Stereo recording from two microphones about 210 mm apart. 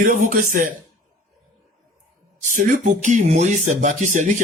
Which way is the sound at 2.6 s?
40° right (ahead or behind).